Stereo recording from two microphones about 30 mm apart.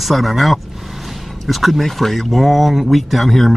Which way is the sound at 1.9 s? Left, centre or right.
Centre.